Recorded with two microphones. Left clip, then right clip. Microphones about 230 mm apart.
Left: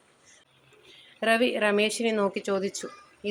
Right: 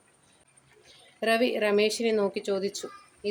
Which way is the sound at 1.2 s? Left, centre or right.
Centre.